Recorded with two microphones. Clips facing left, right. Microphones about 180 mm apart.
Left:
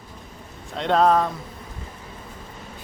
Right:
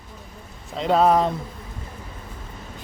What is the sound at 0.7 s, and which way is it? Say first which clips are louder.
Speech: right 1 dB; 5° right (ahead or behind).